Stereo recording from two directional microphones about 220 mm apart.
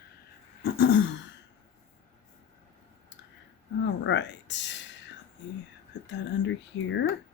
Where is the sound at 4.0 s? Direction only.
55° left (ahead or behind).